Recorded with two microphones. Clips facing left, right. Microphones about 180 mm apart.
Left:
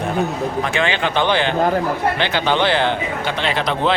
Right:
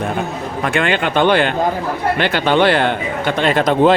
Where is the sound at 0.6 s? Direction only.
55° right (ahead or behind).